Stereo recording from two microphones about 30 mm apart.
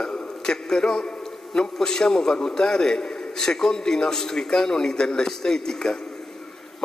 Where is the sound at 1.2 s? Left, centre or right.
Centre.